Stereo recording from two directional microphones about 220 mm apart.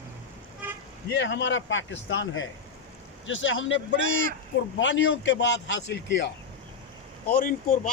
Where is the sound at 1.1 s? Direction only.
55° left (ahead or behind).